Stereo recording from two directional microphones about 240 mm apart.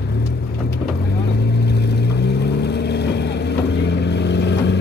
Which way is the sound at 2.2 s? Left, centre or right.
Left.